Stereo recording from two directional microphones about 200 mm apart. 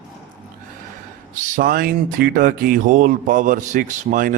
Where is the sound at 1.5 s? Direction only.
45° right (ahead or behind).